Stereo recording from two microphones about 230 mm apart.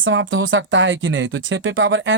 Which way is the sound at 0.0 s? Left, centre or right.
Right.